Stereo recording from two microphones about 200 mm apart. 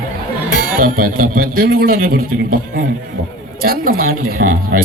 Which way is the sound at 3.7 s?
45° right (ahead or behind).